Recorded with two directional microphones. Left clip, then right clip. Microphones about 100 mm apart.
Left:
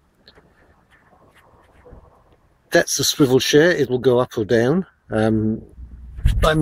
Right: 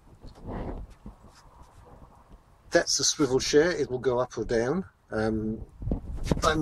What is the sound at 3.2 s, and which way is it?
Speech, 5° left (ahead or behind).